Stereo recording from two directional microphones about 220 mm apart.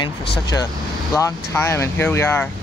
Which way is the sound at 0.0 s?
20° left (ahead or behind).